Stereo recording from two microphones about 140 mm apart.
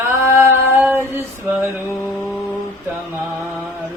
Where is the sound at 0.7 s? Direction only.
15° right (ahead or behind).